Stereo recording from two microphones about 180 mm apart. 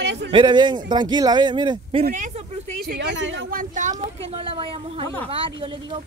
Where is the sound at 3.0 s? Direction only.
80° right.